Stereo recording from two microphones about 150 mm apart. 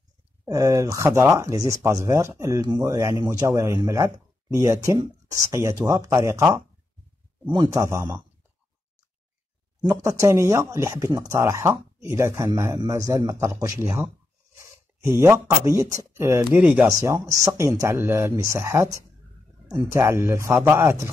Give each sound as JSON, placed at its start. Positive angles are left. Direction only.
{"t": 0.5, "sound": "speech", "side_deg": -20}
{"t": 9.8, "sound": "speech", "side_deg": -25}
{"t": 15.1, "sound": "speech", "side_deg": -15}
{"t": 16.5, "sound": "speech", "side_deg": -5}
{"t": 16.8, "sound": "speech", "side_deg": -20}